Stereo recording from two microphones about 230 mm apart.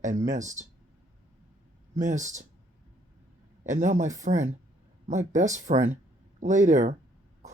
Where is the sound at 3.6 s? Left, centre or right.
Right.